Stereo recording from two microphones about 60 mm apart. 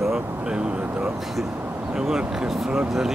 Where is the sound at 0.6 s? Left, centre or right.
Centre.